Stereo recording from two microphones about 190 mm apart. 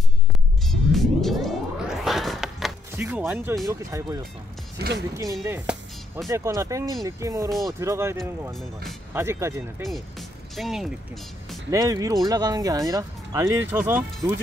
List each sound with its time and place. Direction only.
0.7 s music: centre (ahead or behind)
2.0 s a sound: centre (ahead or behind)
3.0 s speech: 15° right (ahead or behind)
3.3 s speech: centre (ahead or behind)
3.6 s speech: 15° right (ahead or behind)
4.7 s speech: 60° right (ahead or behind)
5.1 s speech: 20° right (ahead or behind)
9.8 s speech: centre (ahead or behind)
11.7 s speech: 20° right (ahead or behind)